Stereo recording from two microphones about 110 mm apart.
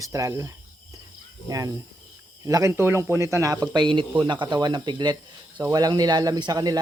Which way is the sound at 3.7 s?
50° right (ahead or behind).